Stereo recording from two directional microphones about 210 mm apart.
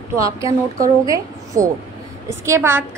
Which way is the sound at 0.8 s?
15° right (ahead or behind).